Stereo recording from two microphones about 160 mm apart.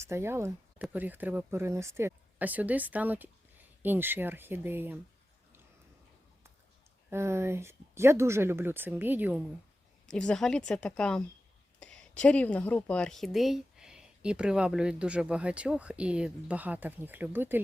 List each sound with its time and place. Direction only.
0.0 s speech: 15° right (ahead or behind)
7.1 s speech: 15° right (ahead or behind)
10.1 s speech: 5° left (ahead or behind); by 17.6 s 10° right (ahead or behind)